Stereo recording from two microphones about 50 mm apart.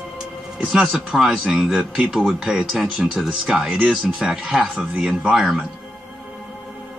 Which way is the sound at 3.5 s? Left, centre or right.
Centre.